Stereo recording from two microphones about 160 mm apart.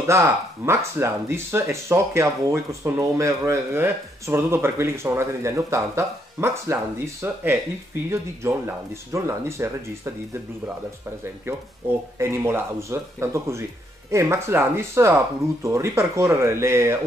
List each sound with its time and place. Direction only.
0.0 s speech: 15° right (ahead or behind)
12.2 s speech: 15° right (ahead or behind)